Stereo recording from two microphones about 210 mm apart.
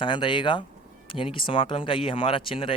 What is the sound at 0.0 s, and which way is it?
Speech, 20° left (ahead or behind).